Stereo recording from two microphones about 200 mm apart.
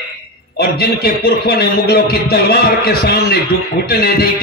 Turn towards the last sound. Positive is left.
turn(degrees=50)  # may be behind; listen again after turning